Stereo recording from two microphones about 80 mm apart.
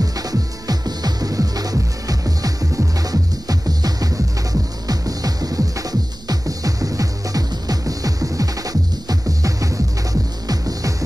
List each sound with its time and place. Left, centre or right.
0.0 s music: right